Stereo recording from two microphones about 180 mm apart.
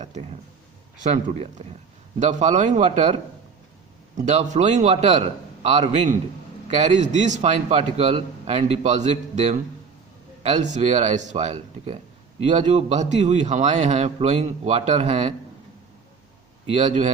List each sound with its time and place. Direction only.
1.1 s a man's voice: 40° right (ahead or behind)
4.3 s a man's voice: 40° right (ahead or behind)
16.7 s a man's voice: 40° right (ahead or behind)